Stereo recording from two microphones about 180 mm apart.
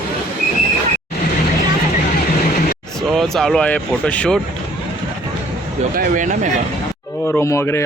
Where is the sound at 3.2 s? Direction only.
Centre (ahead or behind).